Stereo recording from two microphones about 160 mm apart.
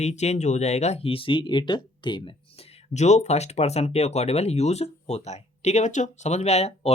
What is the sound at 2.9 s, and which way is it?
Speech, 45° left (ahead or behind).